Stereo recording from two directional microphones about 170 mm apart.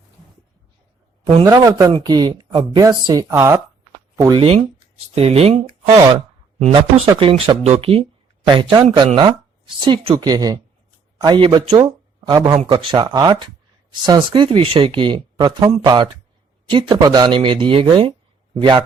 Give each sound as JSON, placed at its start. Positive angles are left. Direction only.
{"t": 1.5, "sound": "speech", "side_deg": -20}
{"t": 4.4, "sound": "speech", "side_deg": -35}